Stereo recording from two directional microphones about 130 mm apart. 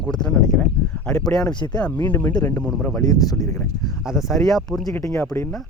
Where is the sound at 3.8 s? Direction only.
5° right (ahead or behind).